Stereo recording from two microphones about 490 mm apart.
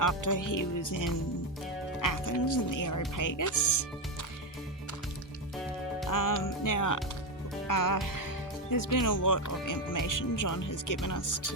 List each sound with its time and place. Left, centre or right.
0.0 s speech: left
6.1 s speech: left